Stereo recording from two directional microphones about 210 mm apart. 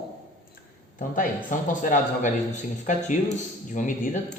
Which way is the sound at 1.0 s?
40° left (ahead or behind).